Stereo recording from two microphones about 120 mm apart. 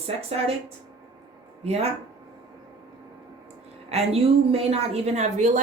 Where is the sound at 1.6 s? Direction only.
60° right (ahead or behind).